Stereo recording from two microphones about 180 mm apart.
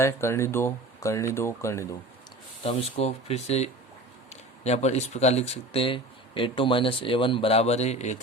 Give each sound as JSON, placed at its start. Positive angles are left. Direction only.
{"t": 0.0, "sound": "speech", "side_deg": 15}
{"t": 2.6, "sound": "speech", "side_deg": 35}